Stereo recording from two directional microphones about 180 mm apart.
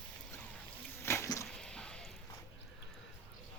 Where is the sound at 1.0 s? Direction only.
15° left (ahead or behind).